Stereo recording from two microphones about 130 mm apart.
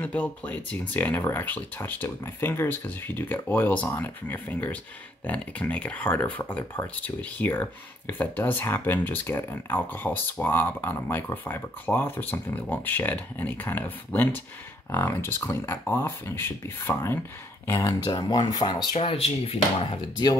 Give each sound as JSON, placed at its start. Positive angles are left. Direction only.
{"t": 0.0, "sound": "speech", "side_deg": 10}